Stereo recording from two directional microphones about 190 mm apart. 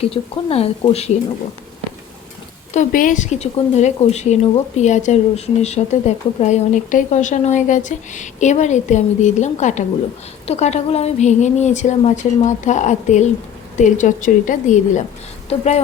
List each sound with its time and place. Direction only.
0.0 s speech: 30° left (ahead or behind)
2.7 s speech: 45° left (ahead or behind)